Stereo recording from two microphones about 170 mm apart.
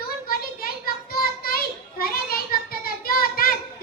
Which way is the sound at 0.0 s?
60° left (ahead or behind).